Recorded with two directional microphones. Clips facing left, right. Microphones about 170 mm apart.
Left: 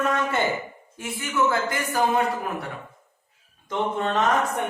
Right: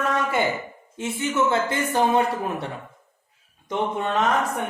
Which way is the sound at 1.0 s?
25° right (ahead or behind).